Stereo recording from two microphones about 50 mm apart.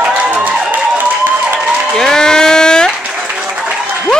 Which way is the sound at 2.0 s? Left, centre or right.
Centre.